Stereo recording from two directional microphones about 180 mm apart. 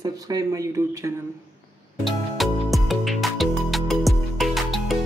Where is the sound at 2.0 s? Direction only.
Centre (ahead or behind).